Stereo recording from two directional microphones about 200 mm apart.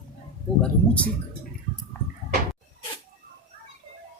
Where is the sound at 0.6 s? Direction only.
5° left (ahead or behind).